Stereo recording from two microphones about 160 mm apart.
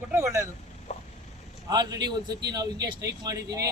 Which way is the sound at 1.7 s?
25° right (ahead or behind).